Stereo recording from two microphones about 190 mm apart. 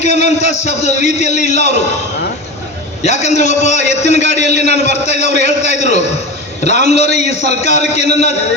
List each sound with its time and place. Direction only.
0.0 s a man's voice: 35° left (ahead or behind)
3.0 s a man's voice: 35° left (ahead or behind)